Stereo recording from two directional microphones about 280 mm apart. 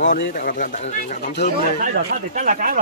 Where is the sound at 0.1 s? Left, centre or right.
Left.